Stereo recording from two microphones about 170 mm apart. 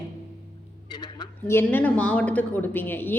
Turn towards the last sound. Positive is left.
turn(degrees=10)  # may be behind; listen again after turning